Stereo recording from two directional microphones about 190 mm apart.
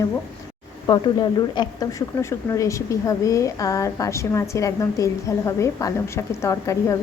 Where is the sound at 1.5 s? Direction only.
15° left (ahead or behind).